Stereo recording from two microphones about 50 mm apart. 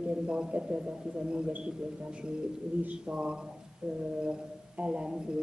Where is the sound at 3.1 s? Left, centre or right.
Right.